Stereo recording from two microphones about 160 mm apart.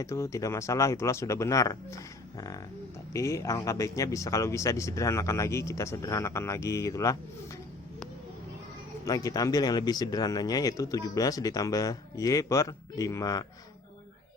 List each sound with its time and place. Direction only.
0.0 s speech: 20° left (ahead or behind)
3.1 s speech: 20° left (ahead or behind)
9.0 s speech: 20° left (ahead or behind)